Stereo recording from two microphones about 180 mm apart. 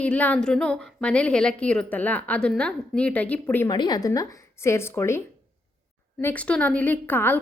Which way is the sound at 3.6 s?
25° left (ahead or behind).